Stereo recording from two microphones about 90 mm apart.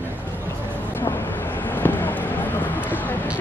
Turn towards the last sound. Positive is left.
turn(degrees=20)  # may be behind; listen again after turning